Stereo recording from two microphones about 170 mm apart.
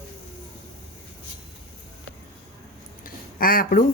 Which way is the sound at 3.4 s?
55° left (ahead or behind).